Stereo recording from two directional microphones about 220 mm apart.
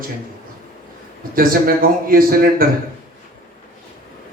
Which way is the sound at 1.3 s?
40° right (ahead or behind).